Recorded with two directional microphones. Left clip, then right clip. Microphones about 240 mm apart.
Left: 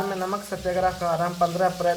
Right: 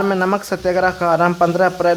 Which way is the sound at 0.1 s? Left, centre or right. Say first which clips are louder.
Right 10 dB; right.